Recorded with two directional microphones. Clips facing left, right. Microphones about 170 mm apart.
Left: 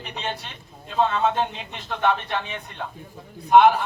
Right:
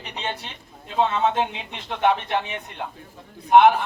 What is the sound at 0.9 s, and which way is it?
A man's voice, 15° right (ahead or behind).